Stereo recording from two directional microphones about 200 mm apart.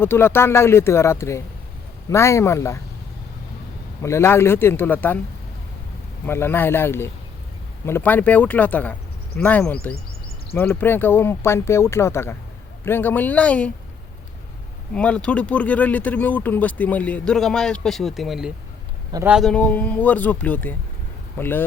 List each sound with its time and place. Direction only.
0.0 s speech: 10° left (ahead or behind)
4.0 s speech: 15° left (ahead or behind)
6.2 s speech: 10° left (ahead or behind)
14.9 s speech: 5° left (ahead or behind)